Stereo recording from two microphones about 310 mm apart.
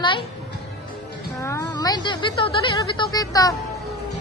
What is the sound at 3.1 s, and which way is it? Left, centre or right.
Speech, centre.